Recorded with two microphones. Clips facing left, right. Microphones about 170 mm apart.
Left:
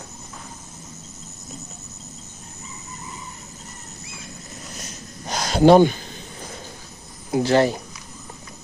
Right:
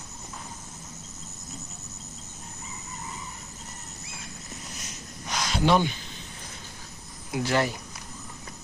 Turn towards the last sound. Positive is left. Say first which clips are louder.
# left 8 dB
turn(degrees=30)  # may be behind; listen again after turning